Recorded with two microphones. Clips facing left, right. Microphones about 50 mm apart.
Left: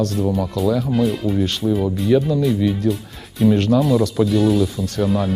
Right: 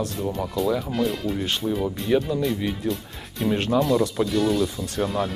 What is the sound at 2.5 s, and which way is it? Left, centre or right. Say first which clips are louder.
Speech: left 8 dB; centre.